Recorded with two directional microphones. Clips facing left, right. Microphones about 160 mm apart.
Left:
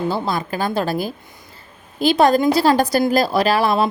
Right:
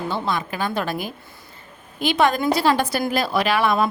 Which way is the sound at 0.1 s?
35° left (ahead or behind).